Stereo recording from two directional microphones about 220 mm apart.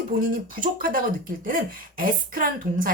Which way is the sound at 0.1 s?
40° right (ahead or behind).